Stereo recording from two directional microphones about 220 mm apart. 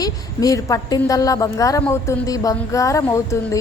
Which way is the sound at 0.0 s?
15° left (ahead or behind).